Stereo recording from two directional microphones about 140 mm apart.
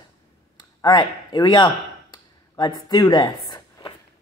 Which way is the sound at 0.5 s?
35° left (ahead or behind).